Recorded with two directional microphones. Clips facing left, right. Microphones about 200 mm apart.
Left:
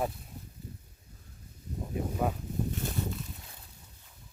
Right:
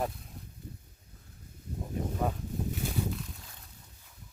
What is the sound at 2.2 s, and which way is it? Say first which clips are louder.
Speech: left 1 dB; 5° left (ahead or behind).